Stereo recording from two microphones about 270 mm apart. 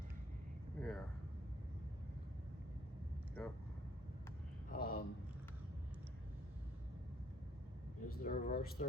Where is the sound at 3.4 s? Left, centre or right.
Centre.